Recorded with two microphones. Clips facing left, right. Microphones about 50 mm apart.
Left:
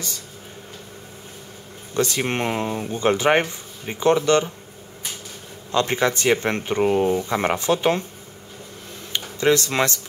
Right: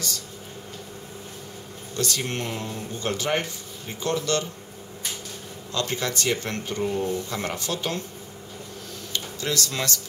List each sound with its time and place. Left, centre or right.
2.0 s speech: left
5.7 s speech: left
6.8 s speech: left
7.1 s speech: left
9.1 s speech: left